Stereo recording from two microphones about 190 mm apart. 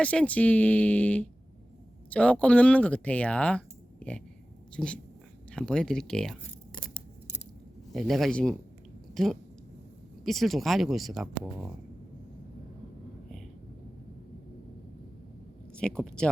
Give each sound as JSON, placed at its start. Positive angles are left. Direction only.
{"t": 0.0, "sound": "speech", "side_deg": 5}
{"t": 7.9, "sound": "speech", "side_deg": 0}
{"t": 15.7, "sound": "speech", "side_deg": 5}